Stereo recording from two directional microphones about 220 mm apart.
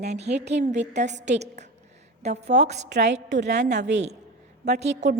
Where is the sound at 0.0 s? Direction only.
30° right (ahead or behind).